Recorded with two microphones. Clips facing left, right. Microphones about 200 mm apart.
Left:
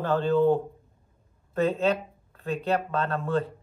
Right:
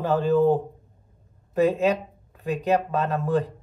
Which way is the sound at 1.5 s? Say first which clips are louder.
Right 3 dB; 15° right (ahead or behind).